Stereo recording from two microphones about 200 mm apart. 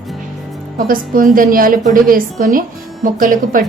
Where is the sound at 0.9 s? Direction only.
45° right (ahead or behind).